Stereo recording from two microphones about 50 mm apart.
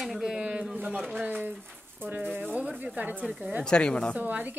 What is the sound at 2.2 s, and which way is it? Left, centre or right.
Speech, right.